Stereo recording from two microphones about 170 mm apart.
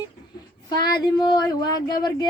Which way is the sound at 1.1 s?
25° left (ahead or behind).